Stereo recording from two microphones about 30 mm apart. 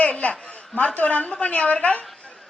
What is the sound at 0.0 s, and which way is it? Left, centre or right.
Chuckle, left.